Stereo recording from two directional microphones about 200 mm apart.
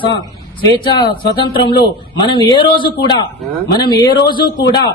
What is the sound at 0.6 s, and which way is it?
Speech, 20° left (ahead or behind).